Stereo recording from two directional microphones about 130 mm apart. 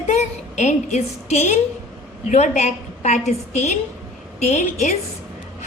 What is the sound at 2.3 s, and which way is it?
A woman's voice, 70° left (ahead or behind).